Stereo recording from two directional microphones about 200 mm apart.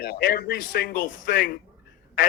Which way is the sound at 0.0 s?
50° left (ahead or behind).